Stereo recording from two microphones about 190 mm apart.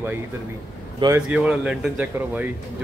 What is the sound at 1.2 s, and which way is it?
Speech, 5° right (ahead or behind).